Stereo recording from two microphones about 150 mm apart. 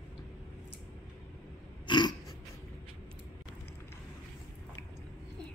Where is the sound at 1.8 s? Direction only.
30° left (ahead or behind).